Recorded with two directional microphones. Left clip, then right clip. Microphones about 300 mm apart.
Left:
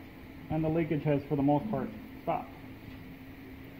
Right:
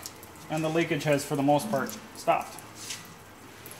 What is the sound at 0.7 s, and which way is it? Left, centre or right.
Speech, right.